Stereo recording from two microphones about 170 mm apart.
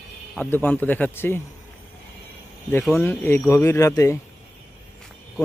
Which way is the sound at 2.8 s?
Centre (ahead or behind).